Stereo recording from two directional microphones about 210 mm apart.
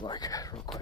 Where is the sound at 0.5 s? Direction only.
Centre (ahead or behind).